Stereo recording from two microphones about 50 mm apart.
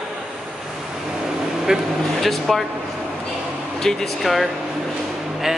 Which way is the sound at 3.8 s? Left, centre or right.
Centre.